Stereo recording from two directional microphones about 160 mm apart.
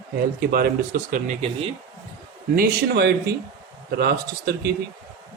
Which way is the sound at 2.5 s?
70° right (ahead or behind).